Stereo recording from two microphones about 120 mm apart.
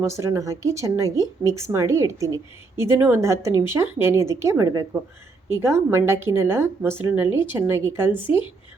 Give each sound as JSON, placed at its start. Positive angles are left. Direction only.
{"t": 0.0, "sound": "a woman's voice", "side_deg": -25}